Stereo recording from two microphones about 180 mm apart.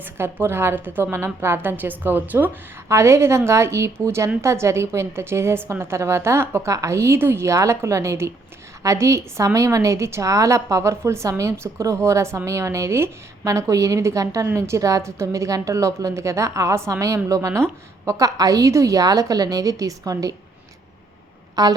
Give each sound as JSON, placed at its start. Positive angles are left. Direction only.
{"t": 0.0, "sound": "a woman's voice", "side_deg": -10}
{"t": 21.5, "sound": "a woman's voice", "side_deg": -20}